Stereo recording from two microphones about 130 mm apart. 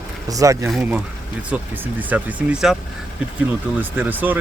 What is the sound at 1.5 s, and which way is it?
Speech, 10° right (ahead or behind).